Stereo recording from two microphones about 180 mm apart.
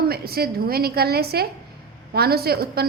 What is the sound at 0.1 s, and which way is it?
A woman's voice, 60° right (ahead or behind).